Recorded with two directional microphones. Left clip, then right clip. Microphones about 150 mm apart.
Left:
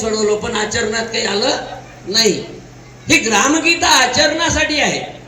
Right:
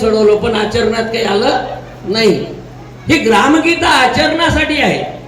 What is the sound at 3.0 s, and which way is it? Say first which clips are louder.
Speech: right 3 dB; 25° right (ahead or behind).